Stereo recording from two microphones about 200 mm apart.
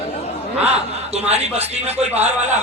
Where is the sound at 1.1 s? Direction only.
35° right (ahead or behind).